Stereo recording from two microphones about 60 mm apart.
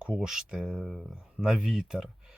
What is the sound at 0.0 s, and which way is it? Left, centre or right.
Speech, centre.